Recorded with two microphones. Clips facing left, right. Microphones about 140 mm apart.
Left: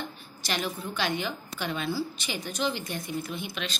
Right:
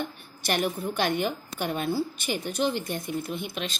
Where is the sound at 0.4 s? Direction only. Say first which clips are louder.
Right 5 dB; 55° right (ahead or behind).